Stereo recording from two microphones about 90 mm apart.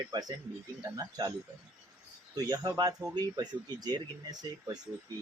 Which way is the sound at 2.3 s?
45° right (ahead or behind).